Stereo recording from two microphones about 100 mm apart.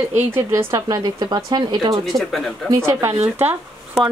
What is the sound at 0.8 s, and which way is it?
Speech, 40° right (ahead or behind).